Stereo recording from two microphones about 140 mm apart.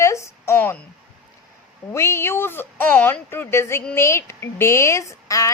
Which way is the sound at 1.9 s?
20° left (ahead or behind).